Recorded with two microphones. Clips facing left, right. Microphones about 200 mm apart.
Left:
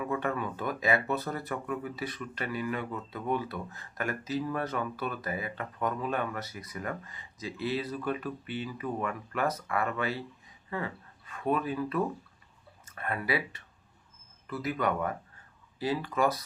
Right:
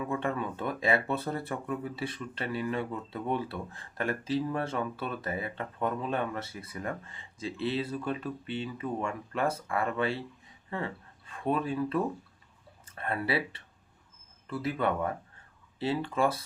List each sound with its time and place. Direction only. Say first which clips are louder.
0.1 s speech: even; 25° right (ahead or behind)
10.7 s a sound: even; 30° right (ahead or behind)
11.5 s speech: right 1 dB; 30° right (ahead or behind)